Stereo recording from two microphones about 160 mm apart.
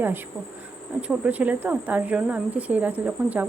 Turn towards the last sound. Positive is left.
turn(degrees=-10)  # may be behind; listen again after turning